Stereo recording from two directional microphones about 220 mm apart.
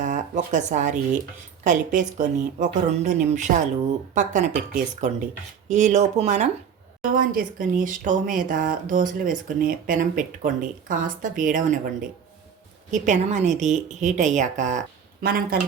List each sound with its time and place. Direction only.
0.0 s speech: 35° right (ahead or behind)
12.9 s speech: 35° right (ahead or behind)